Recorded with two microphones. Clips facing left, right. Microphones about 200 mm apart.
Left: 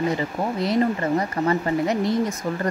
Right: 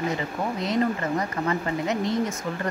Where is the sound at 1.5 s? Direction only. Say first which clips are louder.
Left 5 dB; 35° left (ahead or behind).